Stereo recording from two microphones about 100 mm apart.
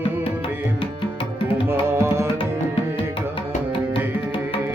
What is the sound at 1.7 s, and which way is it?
Tabla, 25° right (ahead or behind).